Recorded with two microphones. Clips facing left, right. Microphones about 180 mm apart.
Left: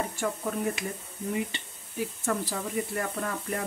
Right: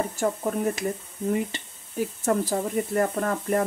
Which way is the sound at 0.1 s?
40° right (ahead or behind).